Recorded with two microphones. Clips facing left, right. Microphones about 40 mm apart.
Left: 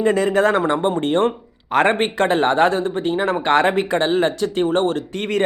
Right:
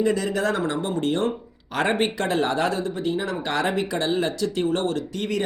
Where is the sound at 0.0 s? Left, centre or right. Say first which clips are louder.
Left 6 dB; left.